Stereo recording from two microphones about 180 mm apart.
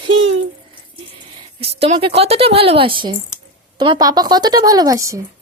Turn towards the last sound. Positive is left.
turn(degrees=-15)  # may be behind; listen again after turning